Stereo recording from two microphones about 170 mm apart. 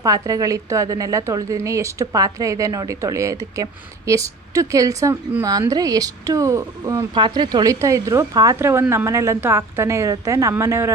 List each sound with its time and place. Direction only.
0.0 s a woman's voice: 20° right (ahead or behind)